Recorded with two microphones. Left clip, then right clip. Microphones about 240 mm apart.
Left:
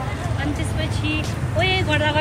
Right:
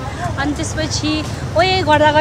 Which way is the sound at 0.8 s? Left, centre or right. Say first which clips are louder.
Right 6 dB; right.